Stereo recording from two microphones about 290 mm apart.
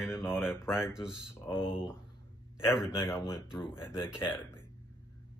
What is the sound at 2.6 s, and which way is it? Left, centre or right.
Speech, centre.